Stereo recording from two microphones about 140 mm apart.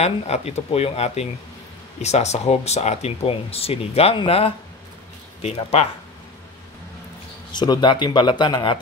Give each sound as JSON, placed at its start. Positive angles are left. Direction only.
{"t": 0.0, "sound": "speech", "side_deg": 50}
{"t": 5.6, "sound": "speech", "side_deg": 45}
{"t": 7.5, "sound": "speech", "side_deg": 30}